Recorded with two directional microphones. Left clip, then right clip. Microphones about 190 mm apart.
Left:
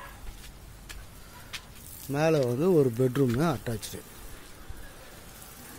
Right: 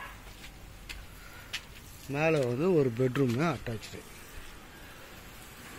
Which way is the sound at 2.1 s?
25° left (ahead or behind).